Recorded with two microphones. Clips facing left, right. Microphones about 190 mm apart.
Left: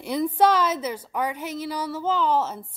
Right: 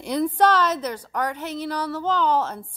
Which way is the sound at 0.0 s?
5° left (ahead or behind).